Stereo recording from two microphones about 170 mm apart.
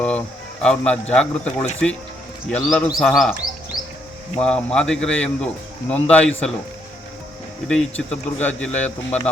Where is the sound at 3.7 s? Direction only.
30° right (ahead or behind).